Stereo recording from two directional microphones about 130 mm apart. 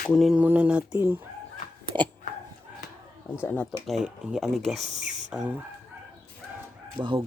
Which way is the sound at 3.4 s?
15° left (ahead or behind).